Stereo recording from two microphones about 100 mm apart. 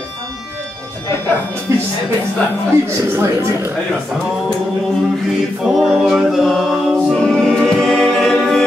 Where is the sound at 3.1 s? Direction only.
25° right (ahead or behind).